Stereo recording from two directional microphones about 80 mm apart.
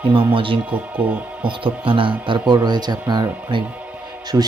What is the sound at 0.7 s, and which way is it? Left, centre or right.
Speech, centre.